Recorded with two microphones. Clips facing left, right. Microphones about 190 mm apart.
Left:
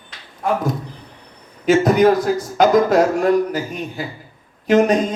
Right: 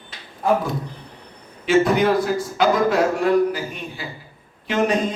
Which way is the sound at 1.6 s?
40° left (ahead or behind).